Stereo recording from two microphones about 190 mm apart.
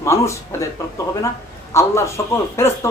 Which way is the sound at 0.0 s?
15° left (ahead or behind).